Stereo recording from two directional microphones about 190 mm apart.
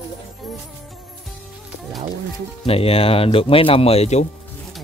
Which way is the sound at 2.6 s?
30° left (ahead or behind).